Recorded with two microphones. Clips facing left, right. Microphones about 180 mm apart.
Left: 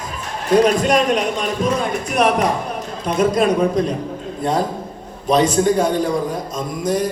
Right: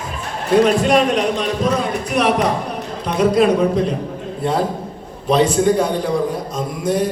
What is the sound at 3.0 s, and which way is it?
Speech, 45° left (ahead or behind).